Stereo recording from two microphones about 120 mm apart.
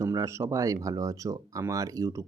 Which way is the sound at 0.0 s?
25° right (ahead or behind).